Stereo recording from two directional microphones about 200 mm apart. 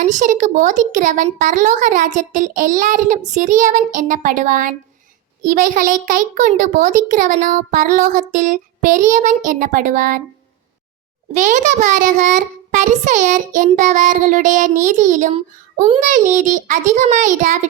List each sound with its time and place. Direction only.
0.0 s a child's voice: 40° right (ahead or behind)
11.3 s a child's voice: 40° right (ahead or behind)